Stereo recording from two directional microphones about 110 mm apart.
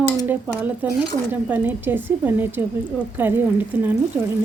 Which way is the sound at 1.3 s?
15° right (ahead or behind).